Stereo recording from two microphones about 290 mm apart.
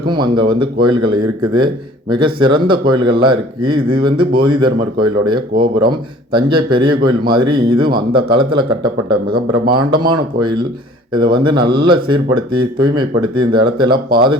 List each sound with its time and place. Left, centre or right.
0.1 s speech: centre
9.9 s speech: centre